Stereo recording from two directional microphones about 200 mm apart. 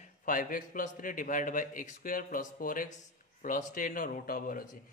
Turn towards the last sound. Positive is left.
turn(degrees=45)  # may be behind; listen again after turning